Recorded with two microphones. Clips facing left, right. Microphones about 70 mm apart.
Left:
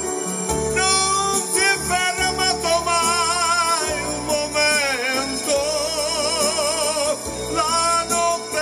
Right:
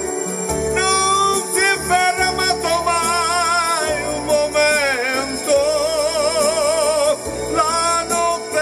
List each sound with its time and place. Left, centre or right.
0.7 s music: right